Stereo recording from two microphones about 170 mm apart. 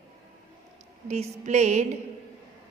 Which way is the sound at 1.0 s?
40° right (ahead or behind).